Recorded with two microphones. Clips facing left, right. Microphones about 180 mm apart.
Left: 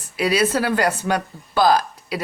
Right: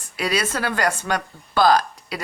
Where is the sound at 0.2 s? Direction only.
5° left (ahead or behind).